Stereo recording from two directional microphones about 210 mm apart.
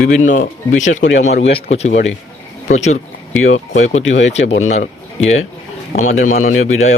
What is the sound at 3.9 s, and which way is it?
Speech, 65° left (ahead or behind).